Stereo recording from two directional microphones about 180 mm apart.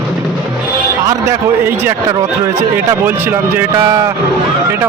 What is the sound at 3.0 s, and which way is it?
Speech, 10° right (ahead or behind).